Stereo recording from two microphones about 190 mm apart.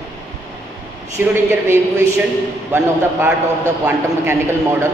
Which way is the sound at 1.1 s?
15° right (ahead or behind).